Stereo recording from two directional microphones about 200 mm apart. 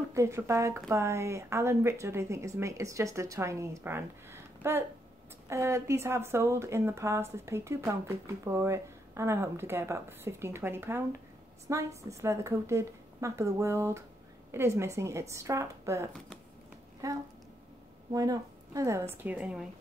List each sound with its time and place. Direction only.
0.1 s speech: 15° right (ahead or behind)